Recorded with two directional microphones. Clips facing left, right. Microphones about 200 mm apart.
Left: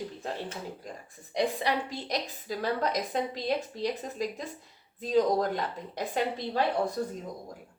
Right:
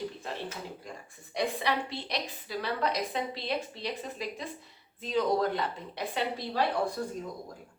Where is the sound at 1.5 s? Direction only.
45° left (ahead or behind).